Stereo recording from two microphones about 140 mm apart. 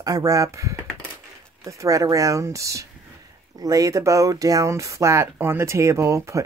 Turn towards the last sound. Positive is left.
turn(degrees=-20)  # may be behind; listen again after turning